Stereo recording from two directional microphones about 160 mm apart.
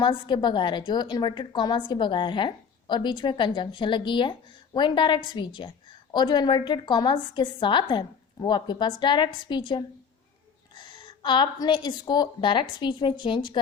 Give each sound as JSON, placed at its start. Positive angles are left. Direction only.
{"t": 0.0, "sound": "a woman's voice", "side_deg": 30}